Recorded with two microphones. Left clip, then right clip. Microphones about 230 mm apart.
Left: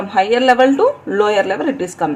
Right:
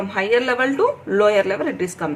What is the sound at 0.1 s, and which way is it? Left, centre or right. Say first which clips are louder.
A woman's voice: left 7 dB; left.